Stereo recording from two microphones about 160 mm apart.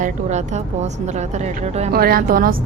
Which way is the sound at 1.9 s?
70° right (ahead or behind).